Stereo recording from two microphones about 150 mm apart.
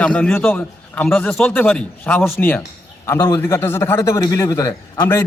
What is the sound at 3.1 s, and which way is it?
A man's voice, 25° left (ahead or behind).